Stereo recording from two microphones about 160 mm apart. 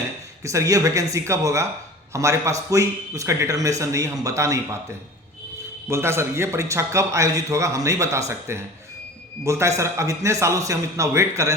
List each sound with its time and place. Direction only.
0.4 s speech: 20° right (ahead or behind)